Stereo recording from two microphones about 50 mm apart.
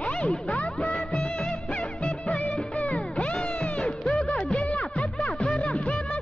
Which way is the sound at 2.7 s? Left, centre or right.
Left.